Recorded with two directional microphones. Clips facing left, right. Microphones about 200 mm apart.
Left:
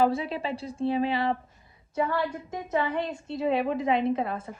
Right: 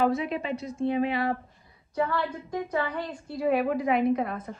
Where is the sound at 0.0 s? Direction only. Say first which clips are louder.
Left 1 dB; 30° left (ahead or behind).